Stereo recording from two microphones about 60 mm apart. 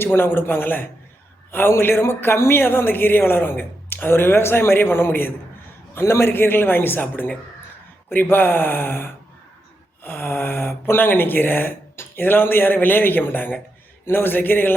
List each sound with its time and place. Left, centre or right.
0.0 s a man's voice: left